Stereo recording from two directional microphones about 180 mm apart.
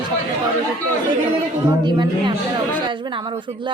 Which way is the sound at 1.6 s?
25° right (ahead or behind).